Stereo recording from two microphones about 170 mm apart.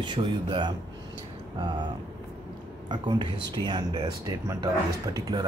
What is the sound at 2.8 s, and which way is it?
Speech, 25° right (ahead or behind).